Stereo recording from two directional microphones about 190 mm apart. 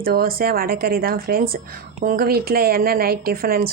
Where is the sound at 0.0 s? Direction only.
50° right (ahead or behind).